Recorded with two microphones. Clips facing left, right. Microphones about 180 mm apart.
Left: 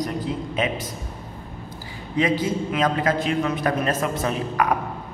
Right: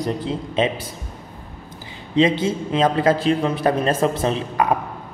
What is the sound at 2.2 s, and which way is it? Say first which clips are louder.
A man's voice: right 4 dB; 25° right (ahead or behind).